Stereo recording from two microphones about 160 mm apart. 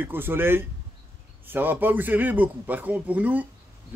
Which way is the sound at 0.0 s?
15° right (ahead or behind).